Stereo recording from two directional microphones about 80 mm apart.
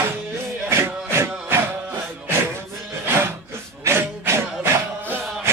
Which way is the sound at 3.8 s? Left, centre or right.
Right.